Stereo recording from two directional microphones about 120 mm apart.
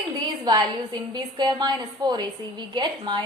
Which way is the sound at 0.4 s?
35° right (ahead or behind).